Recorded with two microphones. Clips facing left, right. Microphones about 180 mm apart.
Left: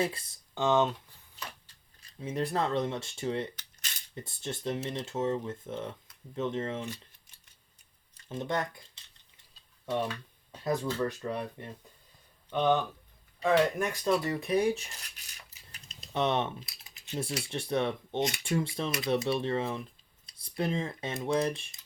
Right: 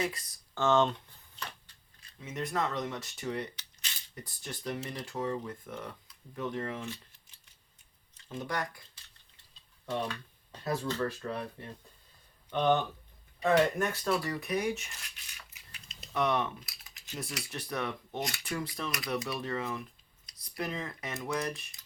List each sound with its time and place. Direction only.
0.0 s speech: 30° left (ahead or behind)
0.5 s speech: 15° left (ahead or behind)
2.1 s speech: 30° left (ahead or behind)
8.3 s speech: 25° left (ahead or behind)
9.8 s a sound: 5° left (ahead or behind)
10.8 s speech: 10° left (ahead or behind)
12.5 s speech: 5° left (ahead or behind)
13.7 s speech: 15° left (ahead or behind); by 14.8 s 30° left (ahead or behind)
15.4 s a sound: 40° left (ahead or behind)
16.1 s speech: 25° left (ahead or behind)